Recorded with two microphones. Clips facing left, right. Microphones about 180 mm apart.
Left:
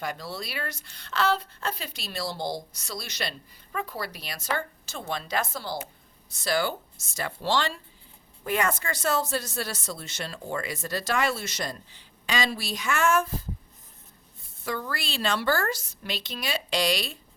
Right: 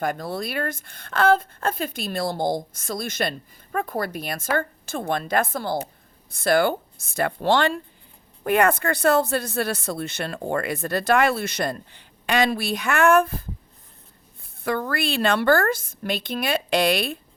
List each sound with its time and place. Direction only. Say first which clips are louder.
0.0 s speech: right 7 dB; 50° right (ahead or behind)
14.6 s speech: right 8 dB; 60° right (ahead or behind)